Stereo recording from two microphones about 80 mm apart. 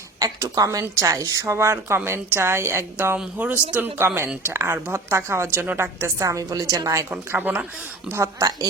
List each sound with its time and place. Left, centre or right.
0.2 s a woman's voice: right
3.3 s a woman's voice: centre
6.2 s a woman's voice: right
7.3 s speech: centre
8.1 s a woman's voice: right